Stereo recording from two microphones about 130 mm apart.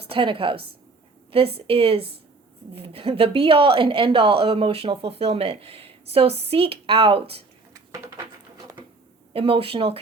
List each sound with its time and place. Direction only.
0.0 s a woman's voice: 40° right (ahead or behind)
7.7 s a sound: 25° right (ahead or behind)
9.3 s a woman's voice: 45° right (ahead or behind)